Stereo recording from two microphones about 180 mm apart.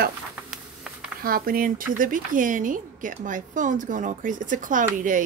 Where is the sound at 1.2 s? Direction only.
55° right (ahead or behind).